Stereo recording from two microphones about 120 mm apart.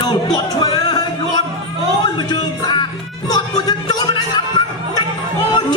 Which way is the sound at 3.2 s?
35° left (ahead or behind).